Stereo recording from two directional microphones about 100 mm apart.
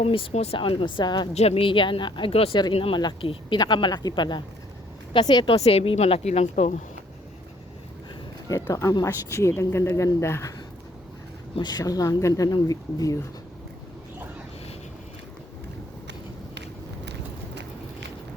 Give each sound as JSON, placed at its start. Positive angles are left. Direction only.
{"t": 0.0, "sound": "speech", "side_deg": 65}
{"t": 1.3, "sound": "speech", "side_deg": 90}
{"t": 2.3, "sound": "speech", "side_deg": 80}
{"t": 2.9, "sound": "speech", "side_deg": 55}
{"t": 5.6, "sound": "a woman's voice", "side_deg": 75}
{"t": 8.4, "sound": "speech", "side_deg": 30}
{"t": 11.6, "sound": "speech", "side_deg": 40}